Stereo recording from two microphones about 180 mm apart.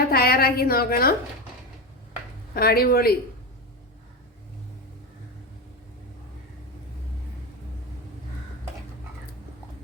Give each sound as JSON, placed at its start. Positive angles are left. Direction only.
{"t": 0.0, "sound": "a woman's voice", "side_deg": 55}
{"t": 2.6, "sound": "speech", "side_deg": 55}